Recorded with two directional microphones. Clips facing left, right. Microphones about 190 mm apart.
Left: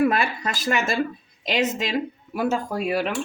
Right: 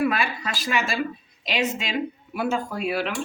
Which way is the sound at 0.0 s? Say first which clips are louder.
Left 3 dB; 45° left (ahead or behind).